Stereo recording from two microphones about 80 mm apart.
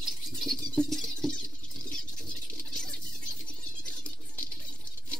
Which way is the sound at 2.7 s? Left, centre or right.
Centre.